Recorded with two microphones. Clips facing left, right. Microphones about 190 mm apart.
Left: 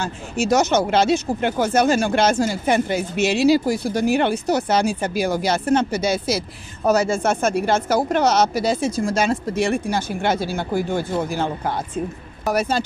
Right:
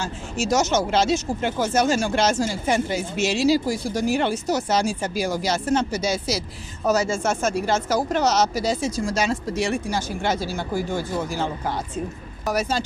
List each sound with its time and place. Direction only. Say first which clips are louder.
0.0 s speech: left 3 dB; 60° left (ahead or behind)